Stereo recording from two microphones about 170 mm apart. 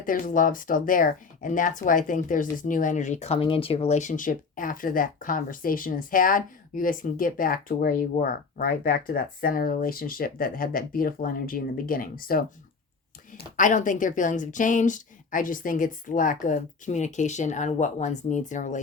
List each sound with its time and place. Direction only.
0.0 s speech: 55° left (ahead or behind)